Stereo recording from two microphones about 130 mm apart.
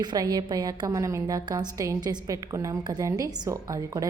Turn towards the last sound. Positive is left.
turn(degrees=-25)  # may be behind; listen again after turning